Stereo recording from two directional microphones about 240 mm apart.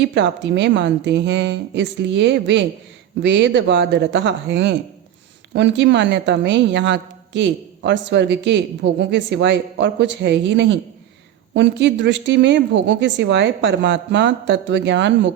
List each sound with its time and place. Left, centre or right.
0.0 s a woman's voice: right